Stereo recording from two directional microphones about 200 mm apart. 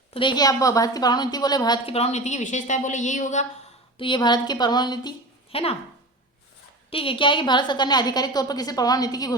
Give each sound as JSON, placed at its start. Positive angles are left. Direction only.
{"t": 0.1, "sound": "a woman's voice", "side_deg": 25}
{"t": 2.0, "sound": "a woman's voice", "side_deg": 35}
{"t": 3.9, "sound": "a woman's voice", "side_deg": 25}
{"t": 6.9, "sound": "a woman's voice", "side_deg": 25}